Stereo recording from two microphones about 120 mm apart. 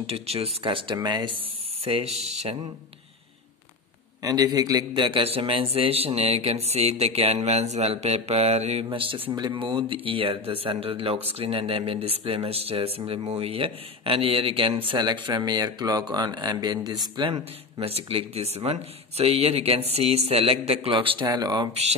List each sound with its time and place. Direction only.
0.0 s a man's voice: 55° right (ahead or behind); by 1.3 s 40° right (ahead or behind)
2.1 s a man's voice: 65° right (ahead or behind)
4.2 s a man's voice: 30° right (ahead or behind); by 8.8 s 65° right (ahead or behind)
8.9 s speech: 50° right (ahead or behind)
17.3 s a man's voice: 55° right (ahead or behind)
21.3 s speech: 35° right (ahead or behind)